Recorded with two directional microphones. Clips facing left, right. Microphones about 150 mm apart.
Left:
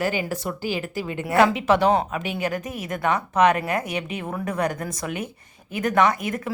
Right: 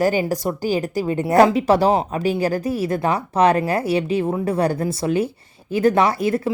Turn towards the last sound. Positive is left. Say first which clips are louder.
# right 3 dB
turn(degrees=-30)  # may be behind; listen again after turning